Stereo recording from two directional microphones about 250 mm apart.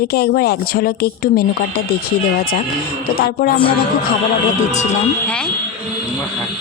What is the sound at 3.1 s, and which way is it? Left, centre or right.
Speech, left.